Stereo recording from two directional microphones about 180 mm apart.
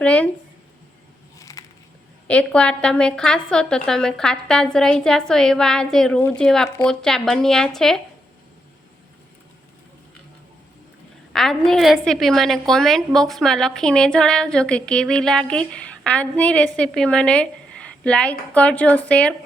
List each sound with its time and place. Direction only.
0.0 s speech: 5° left (ahead or behind)
1.4 s a sound: 20° left (ahead or behind)
2.2 s a woman's voice: 5° left (ahead or behind)
11.3 s a woman's voice: centre (ahead or behind)